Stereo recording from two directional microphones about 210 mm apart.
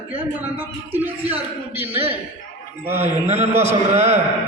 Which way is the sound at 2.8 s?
10° right (ahead or behind).